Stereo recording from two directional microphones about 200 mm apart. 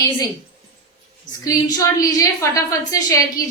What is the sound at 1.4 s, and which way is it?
A woman's voice, 15° left (ahead or behind).